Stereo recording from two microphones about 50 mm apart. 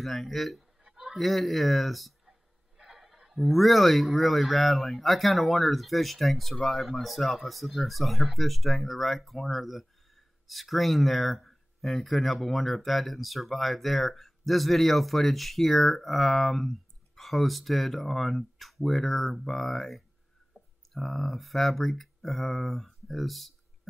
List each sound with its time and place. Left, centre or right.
0.0 s speech: centre
20.5 s clicking: right
20.9 s speech: centre